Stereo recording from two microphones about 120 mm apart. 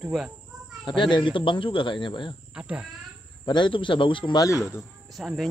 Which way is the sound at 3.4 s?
40° left (ahead or behind).